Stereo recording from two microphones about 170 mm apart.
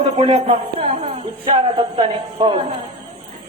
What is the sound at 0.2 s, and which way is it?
Speech, 35° right (ahead or behind).